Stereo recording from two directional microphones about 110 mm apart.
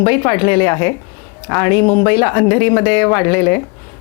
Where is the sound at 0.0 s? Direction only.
20° left (ahead or behind).